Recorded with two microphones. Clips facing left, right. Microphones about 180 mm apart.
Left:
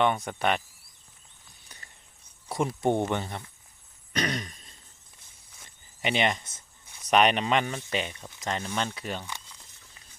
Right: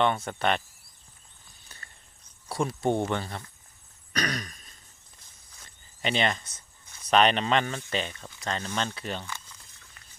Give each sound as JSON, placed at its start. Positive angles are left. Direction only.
{"t": 0.0, "sound": "speech", "side_deg": 10}
{"t": 1.8, "sound": "a sound", "side_deg": 15}
{"t": 2.5, "sound": "speech", "side_deg": 20}
{"t": 4.1, "sound": "throat clearing", "side_deg": 25}
{"t": 5.5, "sound": "cricket", "side_deg": 15}
{"t": 7.0, "sound": "speech", "side_deg": 15}